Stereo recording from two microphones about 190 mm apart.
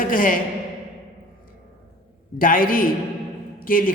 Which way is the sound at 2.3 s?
45° left (ahead or behind).